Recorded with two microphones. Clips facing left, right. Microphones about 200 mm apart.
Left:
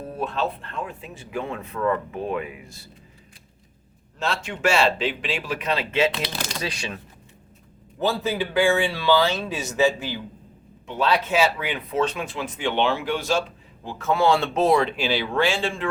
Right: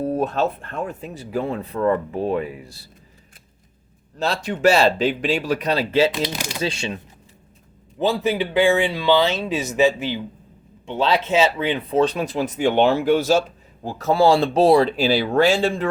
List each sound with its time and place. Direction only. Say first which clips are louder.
0.0 s speech: right 6 dB; 40° right (ahead or behind)
4.2 s speech: right 5 dB; 35° right (ahead or behind)
6.1 s speech: right 4 dB; 15° right (ahead or behind)
6.6 s speech: right 5 dB; 25° right (ahead or behind)